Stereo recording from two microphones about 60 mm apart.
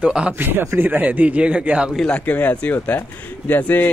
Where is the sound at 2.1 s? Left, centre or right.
Left.